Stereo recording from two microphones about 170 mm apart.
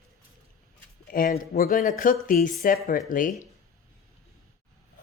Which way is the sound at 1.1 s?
60° left (ahead or behind).